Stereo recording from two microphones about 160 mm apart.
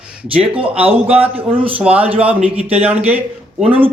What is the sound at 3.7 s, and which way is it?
Speech, 35° right (ahead or behind).